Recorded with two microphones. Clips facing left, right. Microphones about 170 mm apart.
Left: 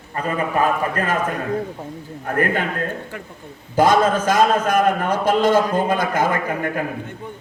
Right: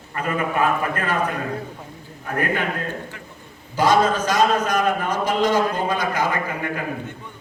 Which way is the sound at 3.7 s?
50° left (ahead or behind).